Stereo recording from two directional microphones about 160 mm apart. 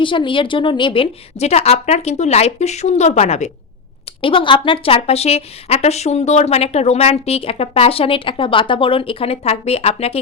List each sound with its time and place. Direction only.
0.0 s a woman's voice: 30° left (ahead or behind)
4.2 s a woman's voice: 35° left (ahead or behind)